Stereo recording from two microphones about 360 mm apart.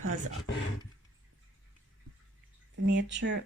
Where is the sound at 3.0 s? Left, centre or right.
Right.